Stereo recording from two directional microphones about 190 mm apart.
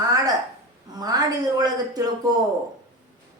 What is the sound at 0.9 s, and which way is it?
A woman's voice, 20° right (ahead or behind).